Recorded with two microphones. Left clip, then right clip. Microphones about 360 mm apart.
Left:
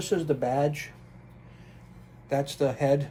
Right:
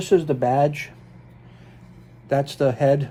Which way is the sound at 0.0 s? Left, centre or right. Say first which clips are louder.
Right 8 dB; right.